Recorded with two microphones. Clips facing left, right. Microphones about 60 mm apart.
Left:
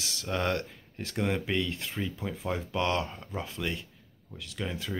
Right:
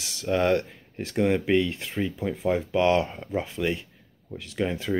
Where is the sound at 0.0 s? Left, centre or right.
Centre.